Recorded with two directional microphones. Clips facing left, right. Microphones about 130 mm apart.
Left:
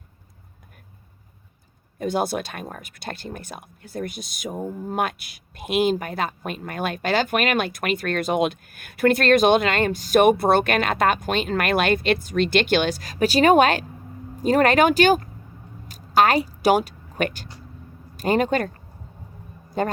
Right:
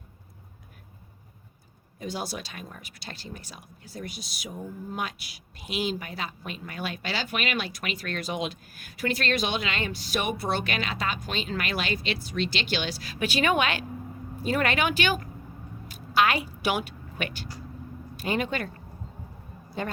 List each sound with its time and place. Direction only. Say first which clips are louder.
2.0 s speech: left 10 dB; 55° left (ahead or behind)
15.9 s vehicle: left 6 dB; 40° left (ahead or behind)
18.2 s speech: left 8 dB; 45° left (ahead or behind)
19.8 s speech: left 8 dB; 45° left (ahead or behind)